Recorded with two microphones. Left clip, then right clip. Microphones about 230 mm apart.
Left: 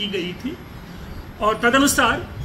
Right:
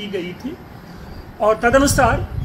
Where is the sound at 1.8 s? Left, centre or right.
Centre.